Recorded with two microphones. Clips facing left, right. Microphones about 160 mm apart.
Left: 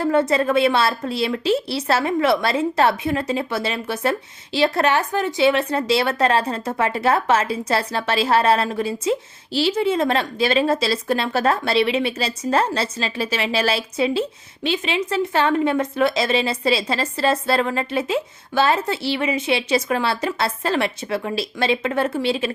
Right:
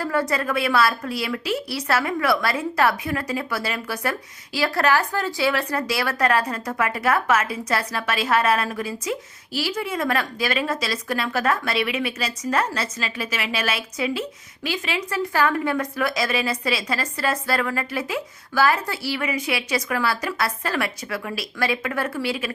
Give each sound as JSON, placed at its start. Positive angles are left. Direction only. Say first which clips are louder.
{"t": 0.0, "sound": "a woman's voice", "louder": "left 6 dB", "side_deg": 25}